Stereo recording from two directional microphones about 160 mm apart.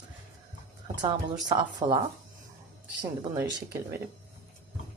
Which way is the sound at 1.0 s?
25° right (ahead or behind).